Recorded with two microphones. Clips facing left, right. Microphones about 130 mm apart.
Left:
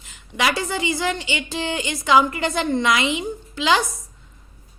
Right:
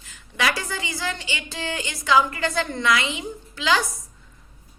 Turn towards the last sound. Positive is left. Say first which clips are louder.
# left 3 dB
turn(degrees=20)  # may be behind; listen again after turning